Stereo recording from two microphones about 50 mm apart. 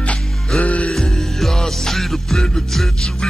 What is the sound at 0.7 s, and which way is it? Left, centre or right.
Music, left.